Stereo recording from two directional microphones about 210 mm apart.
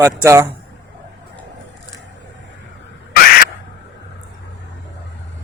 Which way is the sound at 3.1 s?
45° left (ahead or behind).